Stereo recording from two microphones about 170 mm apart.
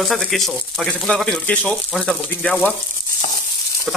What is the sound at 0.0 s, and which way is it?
Speech, centre (ahead or behind).